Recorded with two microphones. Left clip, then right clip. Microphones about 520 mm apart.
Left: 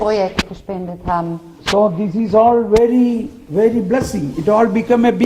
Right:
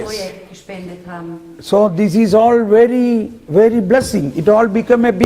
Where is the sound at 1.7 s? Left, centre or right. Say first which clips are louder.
Right 2 dB; centre.